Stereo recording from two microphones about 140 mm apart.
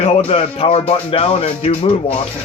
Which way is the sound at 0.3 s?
45° left (ahead or behind).